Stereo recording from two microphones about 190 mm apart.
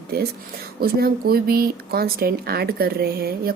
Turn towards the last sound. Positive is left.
turn(degrees=-55)  # may be behind; listen again after turning